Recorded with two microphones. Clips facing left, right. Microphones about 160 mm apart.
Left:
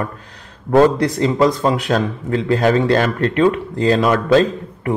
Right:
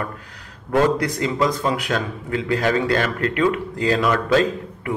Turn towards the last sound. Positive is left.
turn(degrees=35)  # may be behind; listen again after turning